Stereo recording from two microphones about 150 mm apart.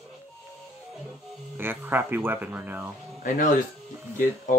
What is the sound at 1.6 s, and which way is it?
Speech, 15° right (ahead or behind).